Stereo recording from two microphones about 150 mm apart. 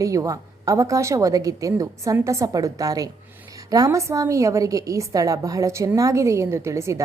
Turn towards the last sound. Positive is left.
turn(degrees=-20)  # may be behind; listen again after turning